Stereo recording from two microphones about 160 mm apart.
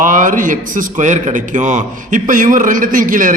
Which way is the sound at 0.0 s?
55° right (ahead or behind).